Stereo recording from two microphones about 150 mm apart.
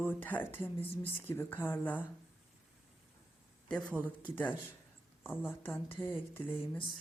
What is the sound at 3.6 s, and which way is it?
Speech, 5° left (ahead or behind).